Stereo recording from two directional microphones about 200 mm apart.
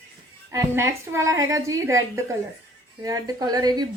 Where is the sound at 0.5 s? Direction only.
15° right (ahead or behind).